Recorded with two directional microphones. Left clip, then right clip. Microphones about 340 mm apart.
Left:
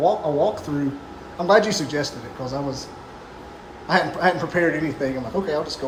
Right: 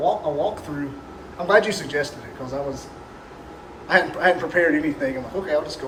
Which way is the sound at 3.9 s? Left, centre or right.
Centre.